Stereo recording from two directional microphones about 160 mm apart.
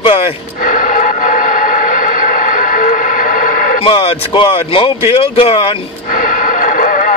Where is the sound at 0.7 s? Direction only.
55° left (ahead or behind).